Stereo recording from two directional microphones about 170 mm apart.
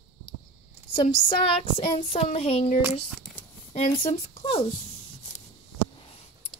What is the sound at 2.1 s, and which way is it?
Speech, 40° left (ahead or behind).